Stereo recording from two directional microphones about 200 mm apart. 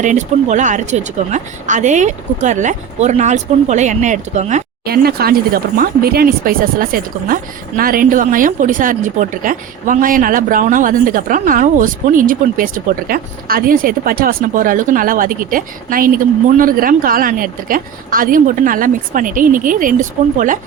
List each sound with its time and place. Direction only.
0.0 s speech: 35° right (ahead or behind)
4.9 s a woman's voice: 50° right (ahead or behind)